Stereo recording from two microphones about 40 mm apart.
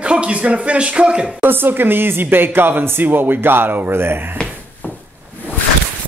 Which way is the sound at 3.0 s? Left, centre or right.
Right.